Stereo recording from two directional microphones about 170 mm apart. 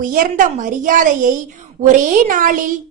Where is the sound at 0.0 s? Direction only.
55° right (ahead or behind).